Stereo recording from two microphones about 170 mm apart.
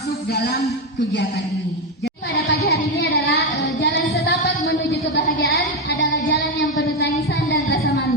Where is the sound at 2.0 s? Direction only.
75° left (ahead or behind).